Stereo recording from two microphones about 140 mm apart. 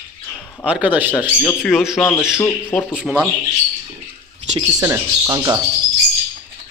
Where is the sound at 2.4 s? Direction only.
15° left (ahead or behind).